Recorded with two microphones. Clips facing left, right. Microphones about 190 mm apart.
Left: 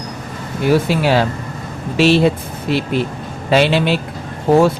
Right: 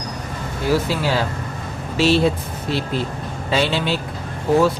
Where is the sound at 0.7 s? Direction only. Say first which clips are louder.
Left 5 dB; 65° left (ahead or behind).